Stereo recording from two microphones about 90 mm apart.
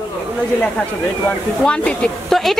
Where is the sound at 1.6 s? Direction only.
10° left (ahead or behind).